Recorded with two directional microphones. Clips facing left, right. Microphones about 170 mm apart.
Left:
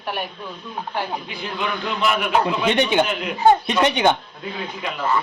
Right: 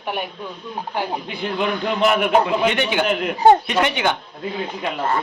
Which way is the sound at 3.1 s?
55° right (ahead or behind).